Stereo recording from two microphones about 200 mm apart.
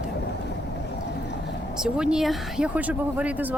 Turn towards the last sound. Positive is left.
turn(degrees=-5)  # may be behind; listen again after turning